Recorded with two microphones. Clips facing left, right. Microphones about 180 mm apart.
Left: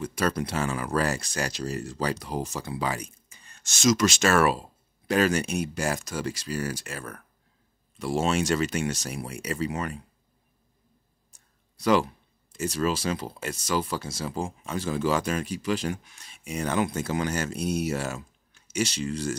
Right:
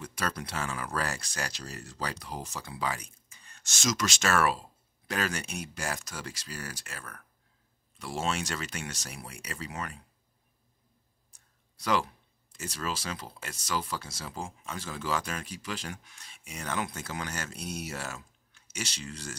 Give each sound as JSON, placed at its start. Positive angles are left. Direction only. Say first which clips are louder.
{"t": 0.0, "sound": "speech", "louder": "left 8 dB", "side_deg": 20}
{"t": 11.8, "sound": "speech", "louder": "left 7 dB", "side_deg": 15}
{"t": 14.0, "sound": "speech", "louder": "left 8 dB", "side_deg": 30}
{"t": 17.6, "sound": "speech", "louder": "left 10 dB", "side_deg": 60}
{"t": 17.8, "sound": "speech", "louder": "left 9 dB", "side_deg": 15}